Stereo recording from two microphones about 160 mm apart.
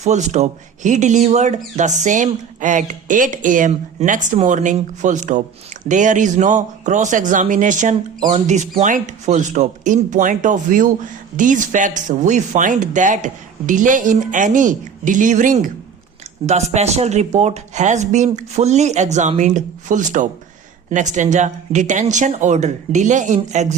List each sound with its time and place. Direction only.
0.0 s speech: 45° right (ahead or behind)